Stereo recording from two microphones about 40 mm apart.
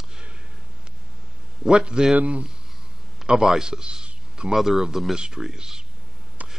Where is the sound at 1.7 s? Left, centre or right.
Right.